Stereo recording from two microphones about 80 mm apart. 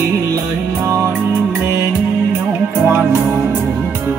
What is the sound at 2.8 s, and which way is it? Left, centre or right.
Music, right.